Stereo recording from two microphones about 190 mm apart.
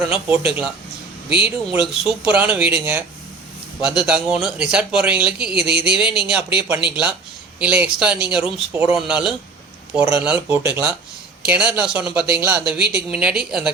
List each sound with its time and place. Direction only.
0.1 s a man's voice: 10° right (ahead or behind)
5.6 s speech: 60° right (ahead or behind)
6.2 s a man's voice: 5° right (ahead or behind)
10.0 s speech: 15° right (ahead or behind)
12.8 s speech: 60° right (ahead or behind)
13.1 s a man's voice: 5° right (ahead or behind)